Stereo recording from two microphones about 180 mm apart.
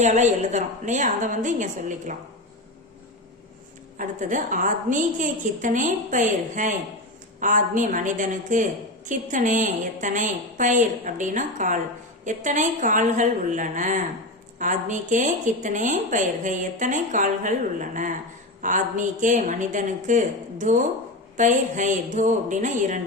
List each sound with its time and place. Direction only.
0.0 s speech: 40° right (ahead or behind)
3.9 s speech: 45° right (ahead or behind)